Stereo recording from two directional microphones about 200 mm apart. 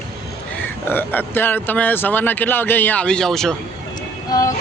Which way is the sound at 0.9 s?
10° left (ahead or behind).